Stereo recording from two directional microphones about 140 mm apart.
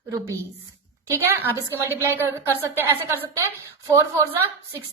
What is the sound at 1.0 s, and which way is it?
A woman's voice, 20° right (ahead or behind).